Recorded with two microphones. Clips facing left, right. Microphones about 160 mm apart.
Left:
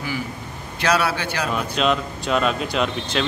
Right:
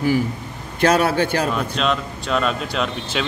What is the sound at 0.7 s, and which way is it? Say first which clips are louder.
Speech: right 5 dB; 45° right (ahead or behind).